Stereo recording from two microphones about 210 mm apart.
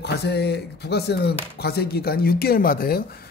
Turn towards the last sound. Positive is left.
turn(degrees=45)  # may be behind; listen again after turning